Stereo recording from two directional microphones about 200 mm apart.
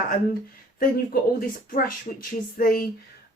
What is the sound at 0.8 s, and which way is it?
Speech, 45° left (ahead or behind).